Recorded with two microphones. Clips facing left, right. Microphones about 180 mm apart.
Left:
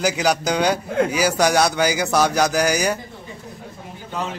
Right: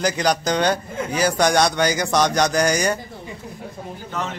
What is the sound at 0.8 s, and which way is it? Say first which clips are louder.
Speech: left 8 dB; 70° left (ahead or behind).